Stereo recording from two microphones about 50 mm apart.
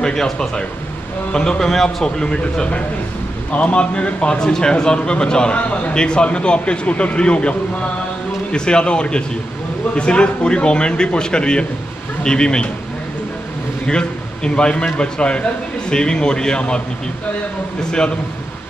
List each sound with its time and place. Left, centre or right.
0.0 s a man's voice: centre
5.6 s a man's voice: left
13.8 s a man's voice: centre